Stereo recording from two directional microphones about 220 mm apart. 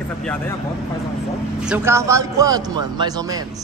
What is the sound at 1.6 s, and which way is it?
A woman's voice, 5° right (ahead or behind).